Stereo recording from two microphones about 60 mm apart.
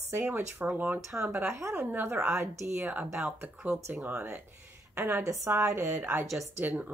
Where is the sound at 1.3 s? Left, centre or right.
Right.